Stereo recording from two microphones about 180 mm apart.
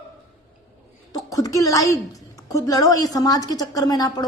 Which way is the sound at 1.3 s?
20° left (ahead or behind).